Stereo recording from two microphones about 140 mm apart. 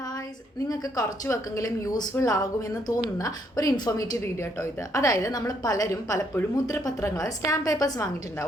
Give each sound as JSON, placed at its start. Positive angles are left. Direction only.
{"t": 0.7, "sound": "a woman's voice", "side_deg": 25}